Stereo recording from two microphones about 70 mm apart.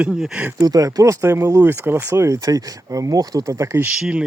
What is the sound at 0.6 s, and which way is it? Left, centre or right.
Speech, right.